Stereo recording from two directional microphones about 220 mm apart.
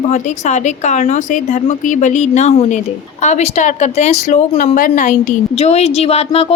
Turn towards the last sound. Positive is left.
turn(degrees=25)  # may be behind; listen again after turning